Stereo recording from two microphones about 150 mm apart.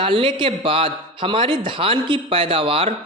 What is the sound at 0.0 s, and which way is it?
Speech, 35° right (ahead or behind).